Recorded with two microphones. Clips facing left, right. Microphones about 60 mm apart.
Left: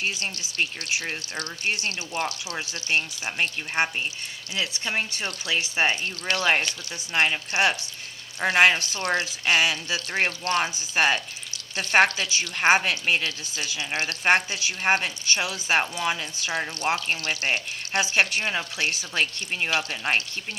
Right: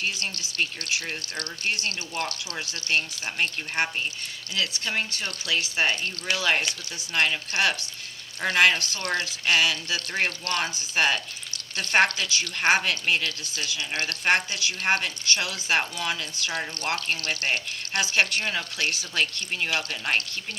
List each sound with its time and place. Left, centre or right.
0.0 s a woman's voice: left